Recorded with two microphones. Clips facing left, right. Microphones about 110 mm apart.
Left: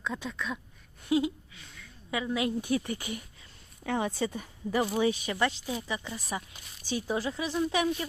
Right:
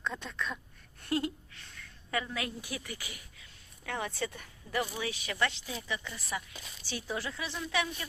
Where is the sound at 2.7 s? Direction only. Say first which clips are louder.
Left 11 dB; 35° left (ahead or behind).